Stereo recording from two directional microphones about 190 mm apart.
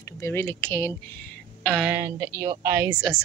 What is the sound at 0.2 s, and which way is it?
A woman's voice, 10° left (ahead or behind).